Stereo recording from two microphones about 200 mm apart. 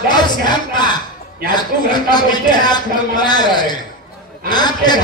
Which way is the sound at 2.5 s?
20° left (ahead or behind).